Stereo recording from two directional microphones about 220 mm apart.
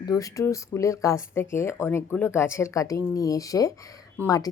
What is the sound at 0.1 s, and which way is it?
A woman's voice, 15° left (ahead or behind).